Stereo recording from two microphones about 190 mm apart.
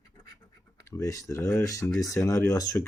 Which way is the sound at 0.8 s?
15° left (ahead or behind).